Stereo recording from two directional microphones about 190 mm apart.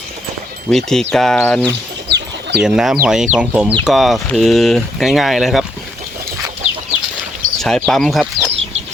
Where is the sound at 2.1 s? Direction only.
65° right (ahead or behind).